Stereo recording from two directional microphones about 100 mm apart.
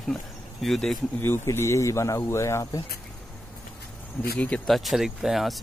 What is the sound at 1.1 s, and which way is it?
Speech, 20° left (ahead or behind).